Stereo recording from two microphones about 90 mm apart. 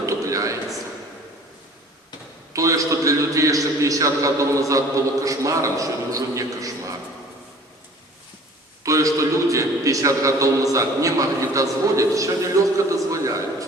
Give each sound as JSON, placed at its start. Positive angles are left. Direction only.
{"t": 0.0, "sound": "a sound", "side_deg": -35}
{"t": 2.5, "sound": "a man's voice", "side_deg": -40}
{"t": 8.8, "sound": "a man's voice", "side_deg": -40}